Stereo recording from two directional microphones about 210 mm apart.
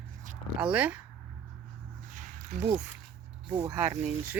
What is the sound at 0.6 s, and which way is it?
Speech, 5° right (ahead or behind).